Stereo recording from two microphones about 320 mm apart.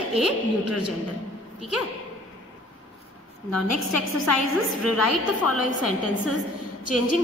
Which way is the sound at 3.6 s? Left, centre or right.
Left.